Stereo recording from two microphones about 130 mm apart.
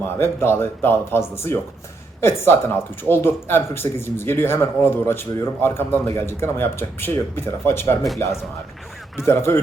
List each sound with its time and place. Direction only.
0.2 s speech: 20° left (ahead or behind)